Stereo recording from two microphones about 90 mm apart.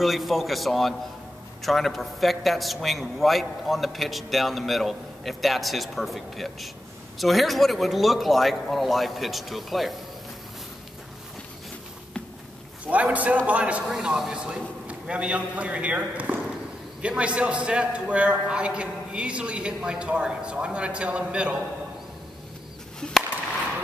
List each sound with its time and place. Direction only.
0.0 s a man's voice: centre (ahead or behind)
12.8 s a man's voice: 15° right (ahead or behind)
22.9 s chop: 10° left (ahead or behind)